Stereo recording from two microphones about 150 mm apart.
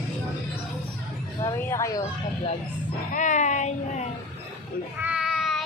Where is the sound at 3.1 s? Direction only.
55° left (ahead or behind).